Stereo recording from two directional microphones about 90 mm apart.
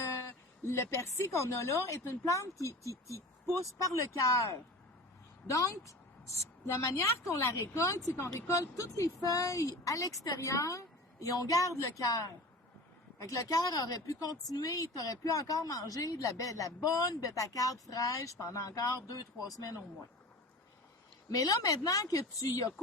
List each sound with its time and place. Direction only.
0.7 s a woman's voice: 30° left (ahead or behind)
21.3 s a woman's voice: 45° left (ahead or behind)